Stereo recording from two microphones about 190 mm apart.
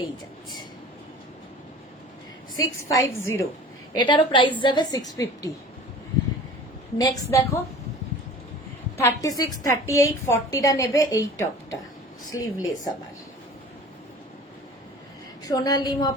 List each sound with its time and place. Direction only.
2.6 s a woman's voice: 15° left (ahead or behind)
7.0 s a woman's voice: 15° left (ahead or behind)
9.0 s a woman's voice: 15° left (ahead or behind)
12.3 s a woman's voice: 20° left (ahead or behind)
15.4 s a woman's voice: 20° left (ahead or behind)